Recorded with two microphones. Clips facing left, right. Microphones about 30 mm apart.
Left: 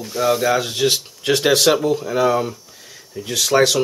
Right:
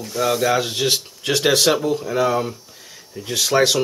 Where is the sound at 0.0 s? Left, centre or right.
Centre.